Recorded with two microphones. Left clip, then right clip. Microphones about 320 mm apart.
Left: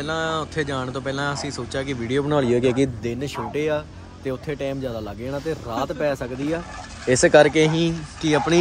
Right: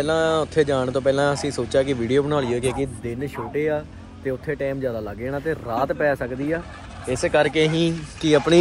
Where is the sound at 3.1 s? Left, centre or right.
Centre.